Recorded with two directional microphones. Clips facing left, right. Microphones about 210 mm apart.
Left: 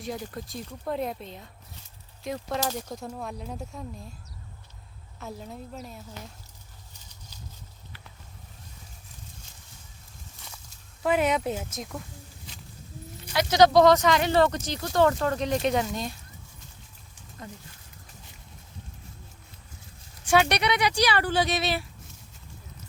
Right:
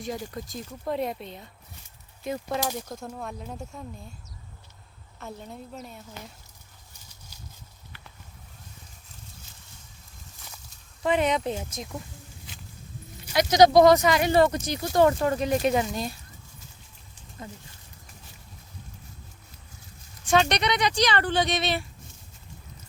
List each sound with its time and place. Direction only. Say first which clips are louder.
0.0 s speech: right 1 dB; centre (ahead or behind)
5.2 s speech: left 1 dB; centre (ahead or behind)
11.0 s speech: even; 5° left (ahead or behind)
13.2 s speech: right 2 dB; 15° right (ahead or behind)
17.4 s speech: right 1 dB; 5° right (ahead or behind)
20.2 s speech: even; 10° left (ahead or behind)